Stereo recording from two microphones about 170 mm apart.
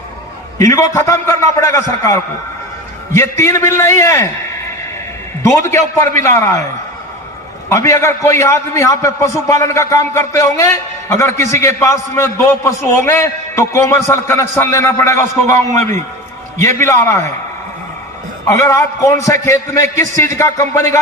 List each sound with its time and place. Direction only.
0.6 s a man's voice: 15° left (ahead or behind)
5.4 s a man's voice: 15° left (ahead or behind)
7.7 s a man's voice: 20° left (ahead or behind)
18.4 s a man's voice: 15° left (ahead or behind)